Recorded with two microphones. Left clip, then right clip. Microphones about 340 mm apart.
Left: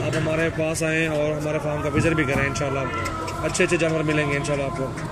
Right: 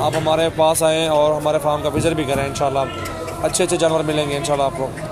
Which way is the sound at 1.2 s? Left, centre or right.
Right.